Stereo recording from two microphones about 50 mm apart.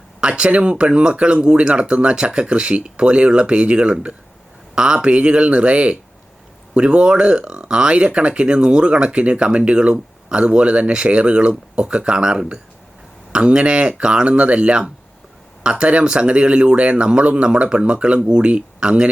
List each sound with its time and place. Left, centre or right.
0.2 s speech: right